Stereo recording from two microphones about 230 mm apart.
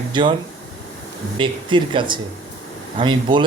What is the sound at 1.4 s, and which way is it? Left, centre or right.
Speech, right.